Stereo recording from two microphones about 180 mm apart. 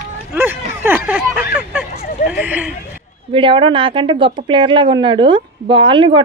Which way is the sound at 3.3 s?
30° right (ahead or behind).